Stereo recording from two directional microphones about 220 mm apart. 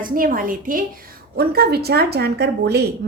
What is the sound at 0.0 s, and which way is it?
A woman's voice, 40° right (ahead or behind).